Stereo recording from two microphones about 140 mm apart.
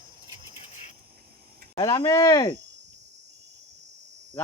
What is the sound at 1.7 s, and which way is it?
Speech, 25° left (ahead or behind).